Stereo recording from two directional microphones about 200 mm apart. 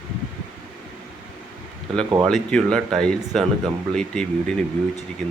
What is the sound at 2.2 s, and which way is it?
Speech, 5° left (ahead or behind).